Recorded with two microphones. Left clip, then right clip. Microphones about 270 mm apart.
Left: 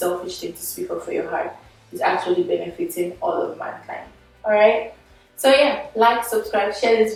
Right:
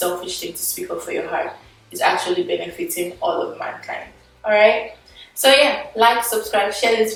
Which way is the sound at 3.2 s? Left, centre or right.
Left.